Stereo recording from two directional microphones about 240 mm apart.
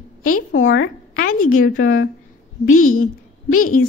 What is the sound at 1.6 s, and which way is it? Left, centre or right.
A woman's voice, left.